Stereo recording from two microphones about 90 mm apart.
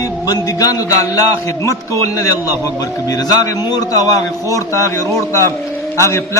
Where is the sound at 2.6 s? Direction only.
45° left (ahead or behind).